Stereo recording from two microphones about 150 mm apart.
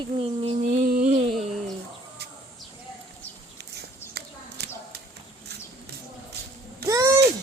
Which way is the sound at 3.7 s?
90° right.